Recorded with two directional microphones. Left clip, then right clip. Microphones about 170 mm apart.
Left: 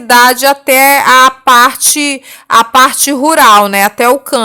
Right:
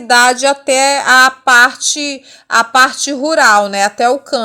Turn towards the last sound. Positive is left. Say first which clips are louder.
# left 4 dB
turn(degrees=20)  # may be behind; listen again after turning